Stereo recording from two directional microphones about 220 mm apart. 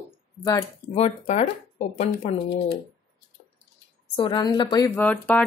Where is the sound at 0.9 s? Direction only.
30° left (ahead or behind).